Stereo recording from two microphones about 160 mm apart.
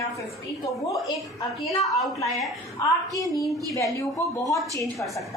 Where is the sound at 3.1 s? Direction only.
20° left (ahead or behind).